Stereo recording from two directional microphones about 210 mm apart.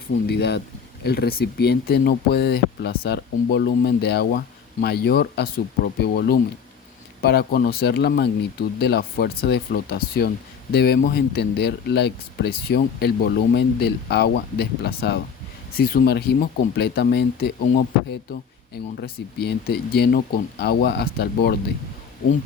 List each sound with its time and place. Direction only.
0.3 s speech: 50° left (ahead or behind)